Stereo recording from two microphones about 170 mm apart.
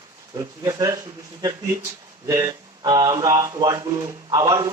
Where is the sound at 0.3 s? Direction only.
20° right (ahead or behind).